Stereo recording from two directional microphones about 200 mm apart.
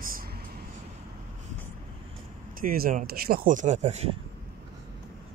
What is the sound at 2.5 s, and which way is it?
Speech, 45° right (ahead or behind).